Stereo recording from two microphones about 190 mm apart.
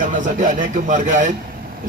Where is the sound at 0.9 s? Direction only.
40° right (ahead or behind).